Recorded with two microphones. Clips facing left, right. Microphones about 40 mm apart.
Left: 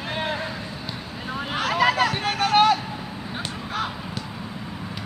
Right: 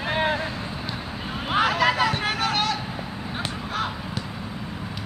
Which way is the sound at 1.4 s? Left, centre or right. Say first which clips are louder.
Right 6 dB; centre.